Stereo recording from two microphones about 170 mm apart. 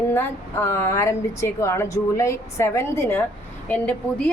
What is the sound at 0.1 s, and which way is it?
A woman's voice, 15° left (ahead or behind).